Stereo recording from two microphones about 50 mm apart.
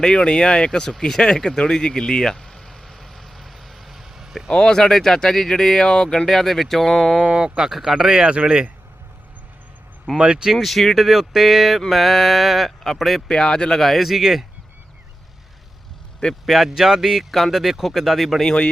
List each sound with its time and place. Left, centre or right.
0.0 s speech: centre
1.2 s vehicle: centre
4.5 s speech: centre
7.3 s speech: centre
7.7 s speech: centre; by 8.7 s right
10.2 s speech: centre
10.6 s speech: centre
13.2 s speech: centre
13.7 s speech: centre
16.5 s speech: centre
18.4 s speech: centre